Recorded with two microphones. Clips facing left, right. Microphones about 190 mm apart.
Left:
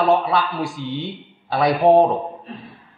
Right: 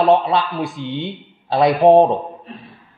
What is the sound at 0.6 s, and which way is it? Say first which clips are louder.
Speech: right 1 dB; 55° right (ahead or behind).